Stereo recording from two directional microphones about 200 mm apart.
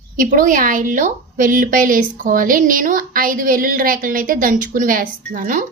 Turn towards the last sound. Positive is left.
turn(degrees=-45)  # may be behind; listen again after turning